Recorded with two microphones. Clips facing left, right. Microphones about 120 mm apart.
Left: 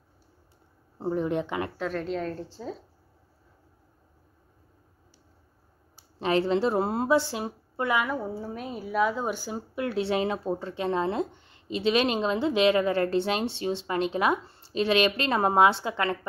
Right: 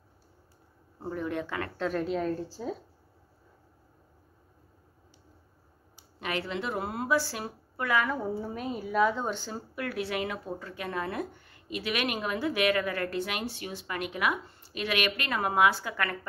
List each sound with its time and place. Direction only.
0.9 s speech: 25° left (ahead or behind)
1.8 s a woman's voice: centre (ahead or behind)
6.1 s speech: 30° left (ahead or behind)
8.0 s a woman's voice: 5° left (ahead or behind)
9.8 s speech: 25° left (ahead or behind)